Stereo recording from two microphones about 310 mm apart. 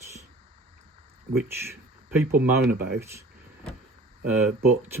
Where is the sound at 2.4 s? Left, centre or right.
Right.